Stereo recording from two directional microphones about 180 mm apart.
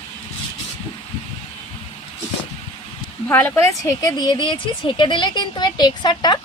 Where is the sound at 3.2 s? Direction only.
10° left (ahead or behind).